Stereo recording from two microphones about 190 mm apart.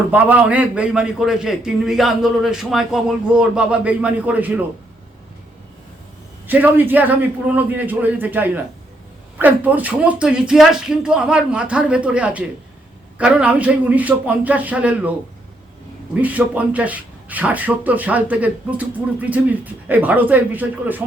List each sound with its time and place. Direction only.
0.1 s a man's voice: 10° right (ahead or behind)
6.5 s a man's voice: 10° right (ahead or behind)
16.2 s speech: 10° right (ahead or behind)